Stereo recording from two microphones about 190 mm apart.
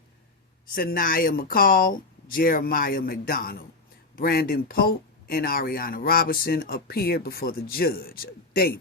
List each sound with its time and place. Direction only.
0.8 s speech: 50° left (ahead or behind)